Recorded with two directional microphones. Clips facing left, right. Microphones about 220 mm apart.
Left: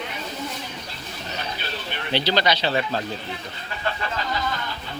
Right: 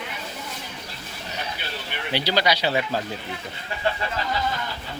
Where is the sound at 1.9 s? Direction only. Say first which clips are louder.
Left 1 dB; 10° right (ahead or behind).